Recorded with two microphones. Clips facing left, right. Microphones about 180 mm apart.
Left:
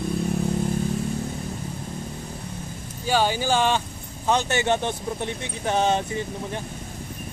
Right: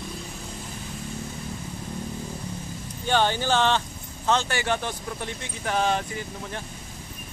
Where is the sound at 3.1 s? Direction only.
10° left (ahead or behind).